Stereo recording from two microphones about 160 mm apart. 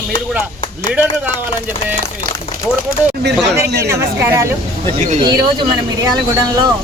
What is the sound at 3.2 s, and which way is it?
Speech, 90° right.